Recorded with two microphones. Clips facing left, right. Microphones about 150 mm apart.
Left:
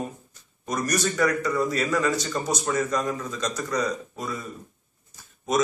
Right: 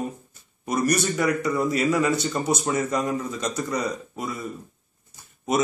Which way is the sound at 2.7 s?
20° right (ahead or behind).